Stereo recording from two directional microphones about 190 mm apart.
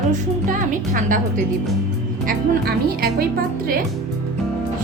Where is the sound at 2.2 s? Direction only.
50° right (ahead or behind).